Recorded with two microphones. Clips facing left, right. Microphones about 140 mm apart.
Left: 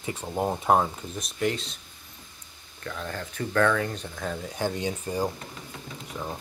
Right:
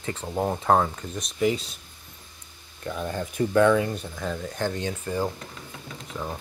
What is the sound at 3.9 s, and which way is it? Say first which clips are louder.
Speech: right 2 dB; centre (ahead or behind).